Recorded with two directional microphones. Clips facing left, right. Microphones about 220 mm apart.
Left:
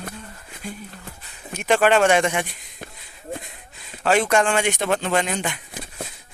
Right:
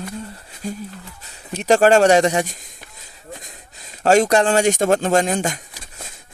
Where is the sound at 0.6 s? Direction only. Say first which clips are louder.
Right 6 dB; 40° right (ahead or behind).